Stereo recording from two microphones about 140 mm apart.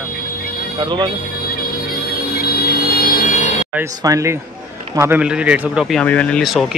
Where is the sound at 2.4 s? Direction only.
90° left; by 3.5 s 65° left (ahead or behind).